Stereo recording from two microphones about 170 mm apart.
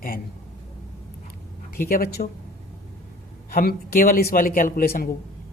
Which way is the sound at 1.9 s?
60° left (ahead or behind).